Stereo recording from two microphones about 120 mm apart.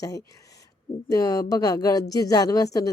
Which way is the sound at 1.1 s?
30° left (ahead or behind).